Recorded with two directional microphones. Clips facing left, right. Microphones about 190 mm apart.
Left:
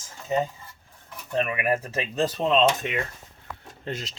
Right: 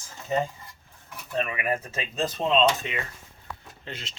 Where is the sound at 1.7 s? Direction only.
40° left (ahead or behind).